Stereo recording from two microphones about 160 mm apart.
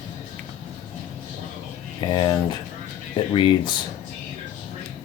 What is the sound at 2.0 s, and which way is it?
Speech, 30° left (ahead or behind).